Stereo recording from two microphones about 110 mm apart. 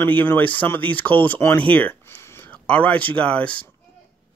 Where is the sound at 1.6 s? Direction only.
15° left (ahead or behind).